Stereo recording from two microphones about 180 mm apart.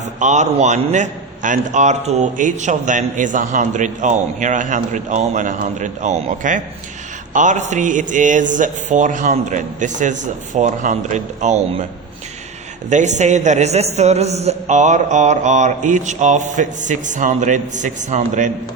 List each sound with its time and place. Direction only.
0.2 s a man's voice: 40° right (ahead or behind)
12.9 s a man's voice: 40° right (ahead or behind)